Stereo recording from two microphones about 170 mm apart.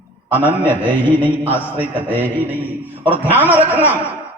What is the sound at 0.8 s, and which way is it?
Mantra, 30° right (ahead or behind).